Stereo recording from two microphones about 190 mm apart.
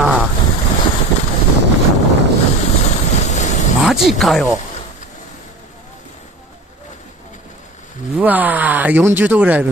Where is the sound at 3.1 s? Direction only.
40° left (ahead or behind).